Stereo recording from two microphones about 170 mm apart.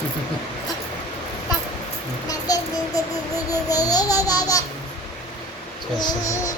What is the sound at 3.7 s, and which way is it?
Babbling, 20° left (ahead or behind).